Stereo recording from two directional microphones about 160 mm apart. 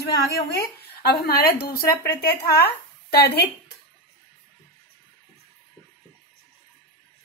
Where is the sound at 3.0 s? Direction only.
85° left.